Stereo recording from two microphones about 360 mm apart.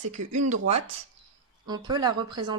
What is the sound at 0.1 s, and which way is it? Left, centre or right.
Speech, centre.